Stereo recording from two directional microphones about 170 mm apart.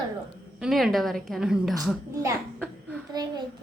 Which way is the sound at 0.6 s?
Centre (ahead or behind).